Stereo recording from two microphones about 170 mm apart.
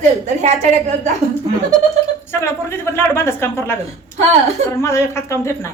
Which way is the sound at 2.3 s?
15° left (ahead or behind).